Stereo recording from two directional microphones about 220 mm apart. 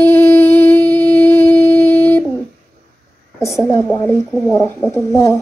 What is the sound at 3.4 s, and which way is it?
A woman's voice, 15° left (ahead or behind).